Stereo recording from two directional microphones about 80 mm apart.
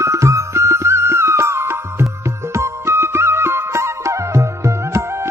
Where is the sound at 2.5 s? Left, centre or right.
Right.